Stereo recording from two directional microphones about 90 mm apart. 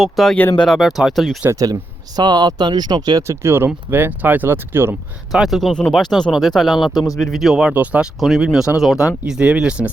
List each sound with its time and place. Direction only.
0.0 s speech: centre (ahead or behind)
0.3 s speech: 20° left (ahead or behind)
0.6 s speech: centre (ahead or behind)
1.5 s speech: 40° right (ahead or behind)
3.2 s speech: 25° right (ahead or behind)
5.3 s speech: centre (ahead or behind)
8.2 s speech: 5° right (ahead or behind)